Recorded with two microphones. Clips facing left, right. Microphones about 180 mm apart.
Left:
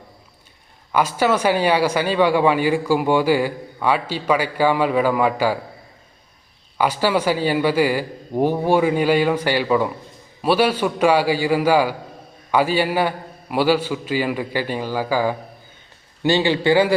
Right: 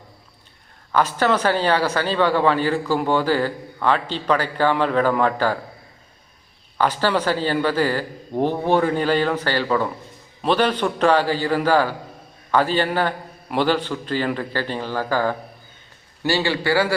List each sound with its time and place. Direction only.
0.9 s speech: 10° left (ahead or behind)
6.7 s a man's voice: 10° left (ahead or behind)